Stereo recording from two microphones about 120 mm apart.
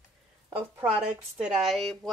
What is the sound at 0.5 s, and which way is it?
Speech, 20° right (ahead or behind).